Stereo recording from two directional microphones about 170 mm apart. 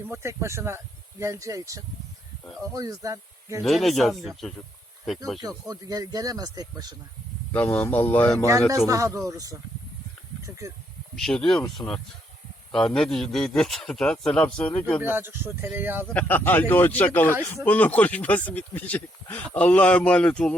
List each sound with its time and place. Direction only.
0.1 s speech: 15° right (ahead or behind)
3.6 s a man's voice: centre (ahead or behind)
5.4 s speech: 20° right (ahead or behind)
7.5 s speech: 10° left (ahead or behind)
8.9 s speech: 20° right (ahead or behind)
11.2 s a man's voice: 5° left (ahead or behind)
12.7 s a man's voice: centre (ahead or behind)
15.0 s speech: 10° right (ahead or behind)
16.1 s speech: 10° left (ahead or behind)